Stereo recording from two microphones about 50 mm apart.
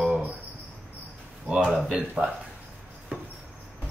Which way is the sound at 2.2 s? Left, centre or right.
Centre.